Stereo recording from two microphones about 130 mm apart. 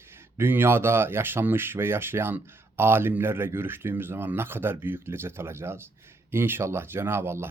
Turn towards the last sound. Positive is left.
turn(degrees=-20)  # may be behind; listen again after turning